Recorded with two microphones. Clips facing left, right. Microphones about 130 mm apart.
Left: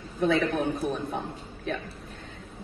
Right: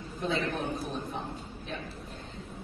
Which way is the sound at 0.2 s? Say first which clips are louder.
Left 7 dB; 60° left (ahead or behind).